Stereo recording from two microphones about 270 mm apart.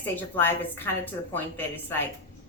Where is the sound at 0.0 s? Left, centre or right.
Centre.